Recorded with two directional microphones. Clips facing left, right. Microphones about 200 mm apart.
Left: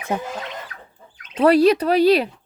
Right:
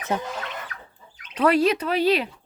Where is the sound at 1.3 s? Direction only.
35° left (ahead or behind).